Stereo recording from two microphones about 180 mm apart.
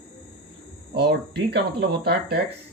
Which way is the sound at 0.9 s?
65° right (ahead or behind).